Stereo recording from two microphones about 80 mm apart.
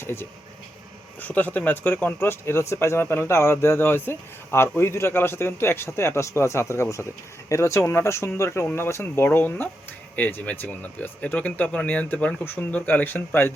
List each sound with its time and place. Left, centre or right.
0.0 s speech: left